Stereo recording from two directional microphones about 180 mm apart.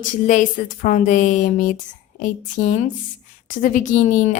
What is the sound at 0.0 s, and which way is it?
A woman's voice, 45° left (ahead or behind).